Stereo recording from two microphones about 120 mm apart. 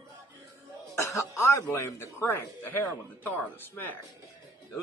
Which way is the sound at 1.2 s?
25° left (ahead or behind).